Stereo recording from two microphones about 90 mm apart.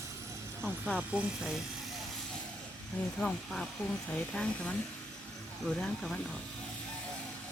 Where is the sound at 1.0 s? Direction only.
15° right (ahead or behind).